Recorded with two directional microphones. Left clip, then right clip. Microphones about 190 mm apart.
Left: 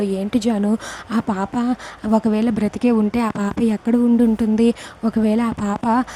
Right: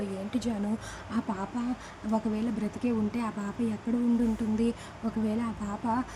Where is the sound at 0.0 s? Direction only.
45° left (ahead or behind).